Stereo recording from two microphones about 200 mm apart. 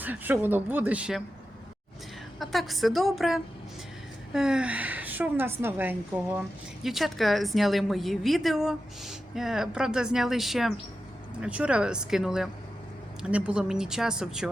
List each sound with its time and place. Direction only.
0.0 s a woman's voice: 10° right (ahead or behind)
2.4 s a woman's voice: centre (ahead or behind)